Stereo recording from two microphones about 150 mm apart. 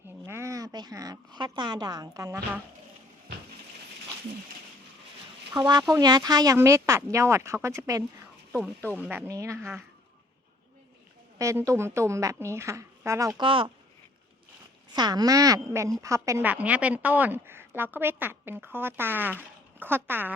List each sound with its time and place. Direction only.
0.3 s a woman's voice: 20° right (ahead or behind)
5.5 s a woman's voice: 30° right (ahead or behind)
11.3 s speech: 20° right (ahead or behind)
13.4 s speech: 35° right (ahead or behind)
14.9 s a woman's voice: 25° right (ahead or behind)